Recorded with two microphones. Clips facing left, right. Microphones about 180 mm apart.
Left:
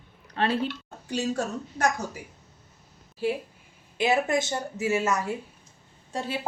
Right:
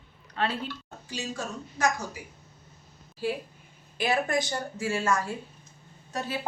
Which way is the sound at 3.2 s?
20° left (ahead or behind).